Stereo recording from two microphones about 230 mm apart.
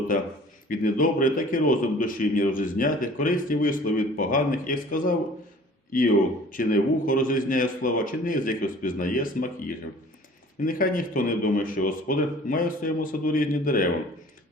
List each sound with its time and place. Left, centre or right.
0.1 s a man's voice: left
6.5 s a man's voice: left